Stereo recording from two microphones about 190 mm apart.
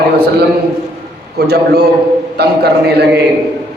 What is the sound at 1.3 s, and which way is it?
A man's voice, 60° right (ahead or behind).